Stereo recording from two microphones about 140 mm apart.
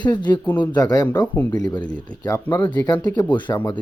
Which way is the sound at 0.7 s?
30° left (ahead or behind).